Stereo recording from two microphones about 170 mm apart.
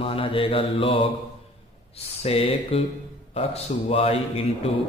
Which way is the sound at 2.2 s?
35° left (ahead or behind).